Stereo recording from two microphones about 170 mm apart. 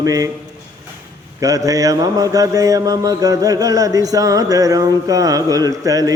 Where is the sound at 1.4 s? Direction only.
20° right (ahead or behind).